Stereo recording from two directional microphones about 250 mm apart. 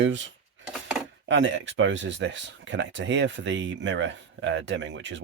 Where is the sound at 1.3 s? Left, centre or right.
Right.